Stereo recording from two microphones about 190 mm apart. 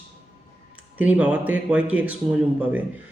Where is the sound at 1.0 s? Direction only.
10° right (ahead or behind).